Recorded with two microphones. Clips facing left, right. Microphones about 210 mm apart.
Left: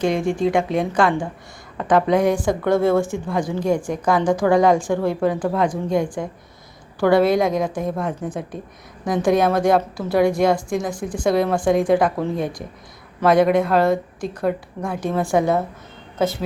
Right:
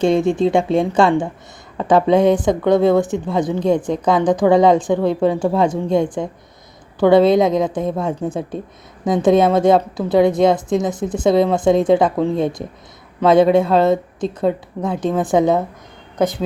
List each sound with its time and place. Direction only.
0.0 s a woman's voice: 25° right (ahead or behind)